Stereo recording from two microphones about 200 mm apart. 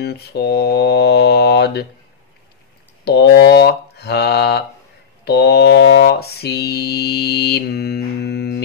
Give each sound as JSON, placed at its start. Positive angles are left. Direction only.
{"t": 0.0, "sound": "mantra", "side_deg": 55}
{"t": 3.1, "sound": "speech", "side_deg": 55}
{"t": 5.2, "sound": "mantra", "side_deg": 55}